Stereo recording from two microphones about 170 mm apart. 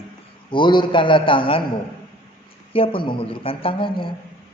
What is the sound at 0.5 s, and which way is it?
A man's voice, 30° left (ahead or behind).